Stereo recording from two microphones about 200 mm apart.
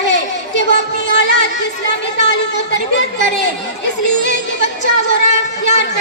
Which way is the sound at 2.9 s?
60° left (ahead or behind).